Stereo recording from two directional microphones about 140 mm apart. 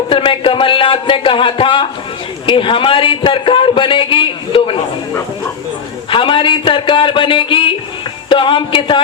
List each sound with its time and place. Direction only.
0.1 s a man's voice: 40° left (ahead or behind)
6.1 s a man's voice: 40° left (ahead or behind)